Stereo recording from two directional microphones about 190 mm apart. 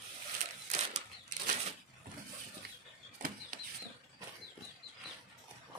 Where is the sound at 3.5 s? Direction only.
50° right (ahead or behind).